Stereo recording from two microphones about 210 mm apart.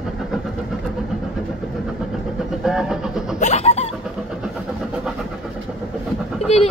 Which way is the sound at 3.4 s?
30° left (ahead or behind).